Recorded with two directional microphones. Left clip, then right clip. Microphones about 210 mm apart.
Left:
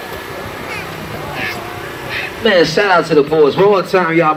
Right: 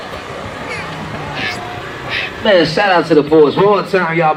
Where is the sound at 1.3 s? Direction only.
10° left (ahead or behind).